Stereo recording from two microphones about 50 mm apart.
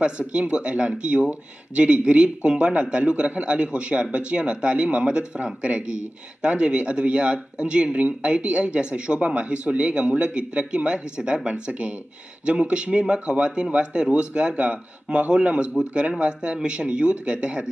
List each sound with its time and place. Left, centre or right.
0.0 s a man's voice: right